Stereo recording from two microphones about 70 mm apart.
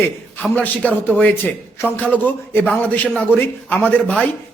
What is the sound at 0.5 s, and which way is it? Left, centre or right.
A man's voice, left.